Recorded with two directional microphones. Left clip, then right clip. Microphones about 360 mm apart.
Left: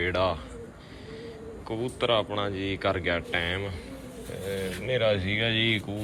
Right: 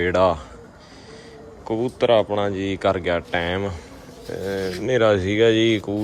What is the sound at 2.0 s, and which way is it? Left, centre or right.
Speech, right.